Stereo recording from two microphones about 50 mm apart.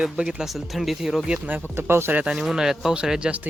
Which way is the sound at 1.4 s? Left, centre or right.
Right.